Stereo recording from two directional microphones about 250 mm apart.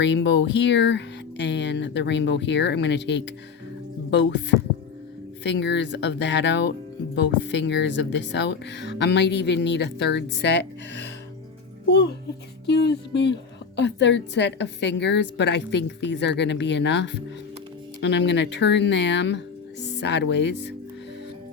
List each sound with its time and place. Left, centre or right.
0.0 s a woman's voice: left